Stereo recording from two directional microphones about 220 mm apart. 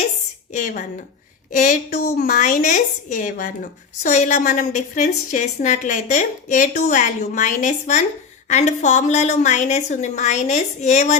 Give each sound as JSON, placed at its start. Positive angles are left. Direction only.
{"t": 0.5, "sound": "a woman's voice", "side_deg": 35}